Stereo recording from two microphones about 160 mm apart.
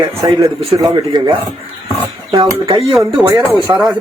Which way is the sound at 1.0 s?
30° right (ahead or behind).